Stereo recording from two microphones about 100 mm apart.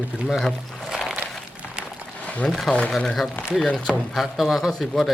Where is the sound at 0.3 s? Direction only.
5° left (ahead or behind).